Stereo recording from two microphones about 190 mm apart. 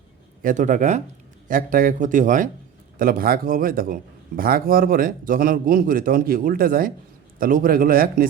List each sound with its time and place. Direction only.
0.4 s a man's voice: 40° right (ahead or behind)